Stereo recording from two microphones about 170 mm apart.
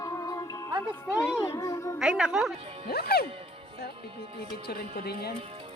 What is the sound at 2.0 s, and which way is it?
Speech, 5° right (ahead or behind).